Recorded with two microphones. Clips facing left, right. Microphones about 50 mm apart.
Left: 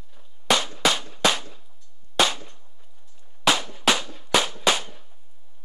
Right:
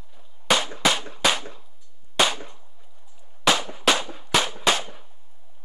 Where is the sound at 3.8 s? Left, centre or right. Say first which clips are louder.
Right 1 dB; centre.